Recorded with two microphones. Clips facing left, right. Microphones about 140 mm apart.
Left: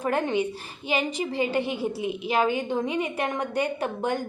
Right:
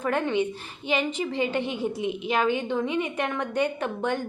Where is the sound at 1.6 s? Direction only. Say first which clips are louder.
Even; 10° left (ahead or behind).